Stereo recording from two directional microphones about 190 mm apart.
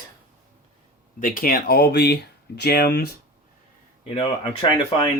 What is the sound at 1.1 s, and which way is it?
Speech, 45° left (ahead or behind).